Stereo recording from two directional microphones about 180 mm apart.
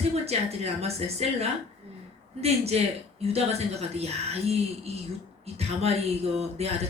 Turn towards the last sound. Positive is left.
turn(degrees=-35)  # may be behind; listen again after turning